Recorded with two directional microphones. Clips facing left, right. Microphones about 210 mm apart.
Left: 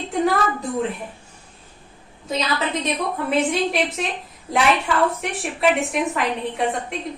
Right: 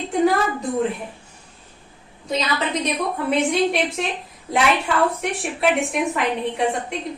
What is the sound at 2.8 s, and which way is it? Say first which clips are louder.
A woman's voice: right 1 dB; centre (ahead or behind).